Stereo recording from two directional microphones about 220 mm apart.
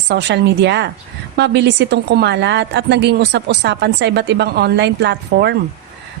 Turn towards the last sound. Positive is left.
turn(degrees=-50)  # may be behind; listen again after turning